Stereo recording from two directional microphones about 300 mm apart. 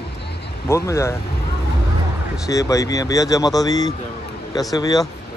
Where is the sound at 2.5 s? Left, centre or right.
Centre.